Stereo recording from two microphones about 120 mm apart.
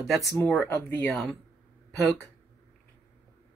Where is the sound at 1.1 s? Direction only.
Centre (ahead or behind).